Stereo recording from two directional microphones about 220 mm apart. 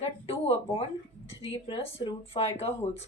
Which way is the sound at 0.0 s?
25° left (ahead or behind).